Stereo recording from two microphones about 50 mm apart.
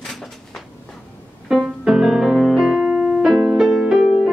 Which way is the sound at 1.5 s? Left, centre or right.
Centre.